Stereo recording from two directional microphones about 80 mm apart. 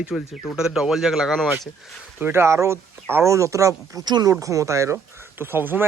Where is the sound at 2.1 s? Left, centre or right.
Right.